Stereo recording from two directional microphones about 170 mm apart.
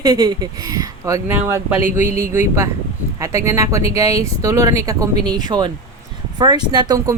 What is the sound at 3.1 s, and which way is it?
A woman's voice, 20° right (ahead or behind).